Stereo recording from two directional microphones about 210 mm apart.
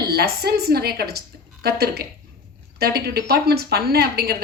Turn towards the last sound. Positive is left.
turn(degrees=-50)  # may be behind; listen again after turning